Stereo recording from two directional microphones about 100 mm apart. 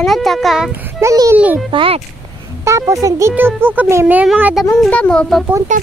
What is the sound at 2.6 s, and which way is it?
Speech, 30° right (ahead or behind).